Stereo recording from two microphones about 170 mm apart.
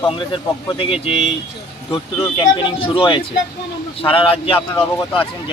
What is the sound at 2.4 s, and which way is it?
Speech, 30° left (ahead or behind).